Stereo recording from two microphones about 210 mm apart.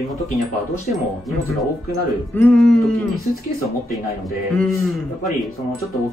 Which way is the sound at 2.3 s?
5° left (ahead or behind).